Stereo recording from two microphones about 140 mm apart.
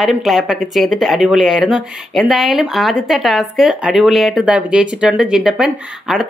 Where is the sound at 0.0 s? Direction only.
Centre (ahead or behind).